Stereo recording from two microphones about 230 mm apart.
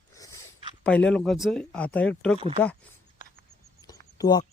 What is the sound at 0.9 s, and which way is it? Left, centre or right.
Speech, centre.